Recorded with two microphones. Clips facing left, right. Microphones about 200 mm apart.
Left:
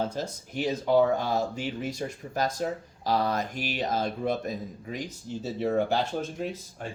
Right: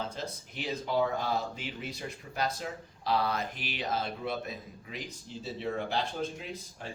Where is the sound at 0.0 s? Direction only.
45° left (ahead or behind).